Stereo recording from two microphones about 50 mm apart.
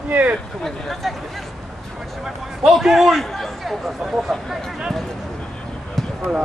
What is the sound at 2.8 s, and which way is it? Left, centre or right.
Speech, centre.